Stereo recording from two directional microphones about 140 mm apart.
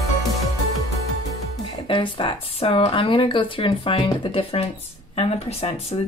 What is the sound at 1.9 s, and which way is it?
Speech, 35° left (ahead or behind).